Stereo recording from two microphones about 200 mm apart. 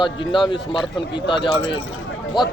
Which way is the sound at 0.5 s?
25° left (ahead or behind).